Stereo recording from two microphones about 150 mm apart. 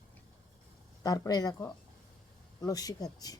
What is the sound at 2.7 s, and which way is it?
Speech, 25° left (ahead or behind).